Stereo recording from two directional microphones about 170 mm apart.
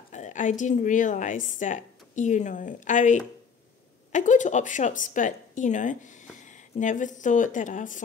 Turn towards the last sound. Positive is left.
turn(degrees=50)  # may be behind; listen again after turning